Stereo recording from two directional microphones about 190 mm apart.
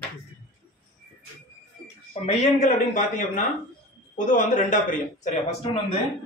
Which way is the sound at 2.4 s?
40° left (ahead or behind).